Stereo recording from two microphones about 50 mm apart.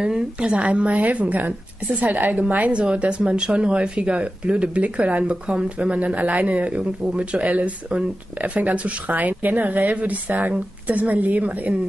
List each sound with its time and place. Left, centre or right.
0.0 s a woman's voice: centre